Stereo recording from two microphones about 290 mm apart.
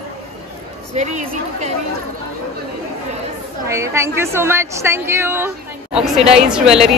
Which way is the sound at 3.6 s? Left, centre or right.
Centre.